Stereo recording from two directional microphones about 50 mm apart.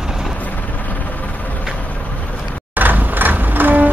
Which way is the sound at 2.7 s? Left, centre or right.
Right.